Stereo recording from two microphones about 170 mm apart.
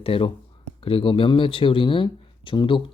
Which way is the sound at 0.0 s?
35° left (ahead or behind).